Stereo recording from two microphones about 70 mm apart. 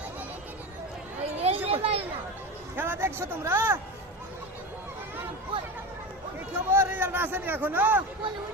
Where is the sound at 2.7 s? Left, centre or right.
Right.